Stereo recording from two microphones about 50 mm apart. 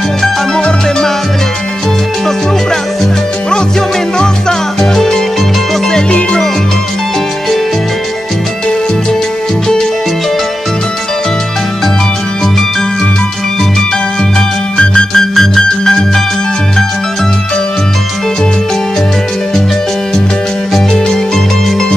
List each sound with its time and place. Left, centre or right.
0.2 s music: centre
4.2 s music: centre
14.8 s music: centre
20.7 s music: centre